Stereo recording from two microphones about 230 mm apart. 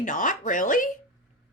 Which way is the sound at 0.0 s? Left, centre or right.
Left.